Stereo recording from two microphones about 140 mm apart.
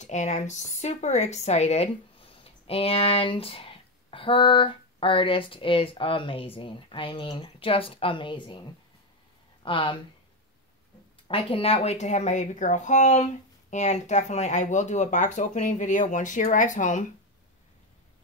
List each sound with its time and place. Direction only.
0.0 s speech: 55° left (ahead or behind); by 9.9 s 35° left (ahead or behind)
11.2 s speech: 40° left (ahead or behind); by 17.0 s 65° left (ahead or behind)